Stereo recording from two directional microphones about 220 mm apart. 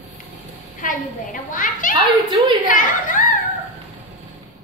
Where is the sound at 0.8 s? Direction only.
40° left (ahead or behind).